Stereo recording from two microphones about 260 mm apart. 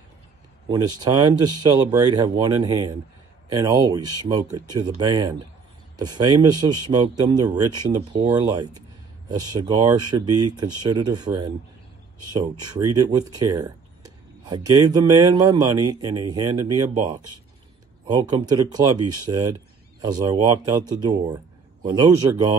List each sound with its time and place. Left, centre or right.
0.7 s speech: centre